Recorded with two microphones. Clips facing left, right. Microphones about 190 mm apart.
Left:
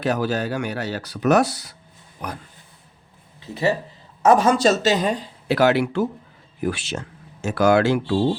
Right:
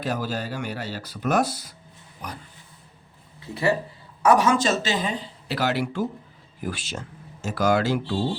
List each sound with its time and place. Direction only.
0.0 s speech: 70° left (ahead or behind)
3.4 s speech: 20° left (ahead or behind)
4.6 s speech: 40° left (ahead or behind); by 8.0 s 65° left (ahead or behind)